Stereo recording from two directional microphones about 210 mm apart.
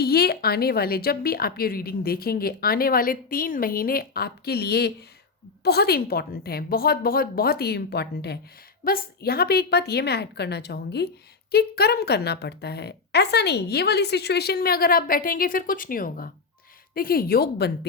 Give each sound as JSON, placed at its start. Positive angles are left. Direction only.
{"t": 0.0, "sound": "a woman's voice", "side_deg": 50}